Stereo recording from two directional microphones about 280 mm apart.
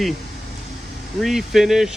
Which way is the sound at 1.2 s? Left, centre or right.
Centre.